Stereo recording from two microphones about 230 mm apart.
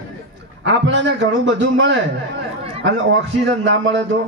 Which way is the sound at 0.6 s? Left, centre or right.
Right.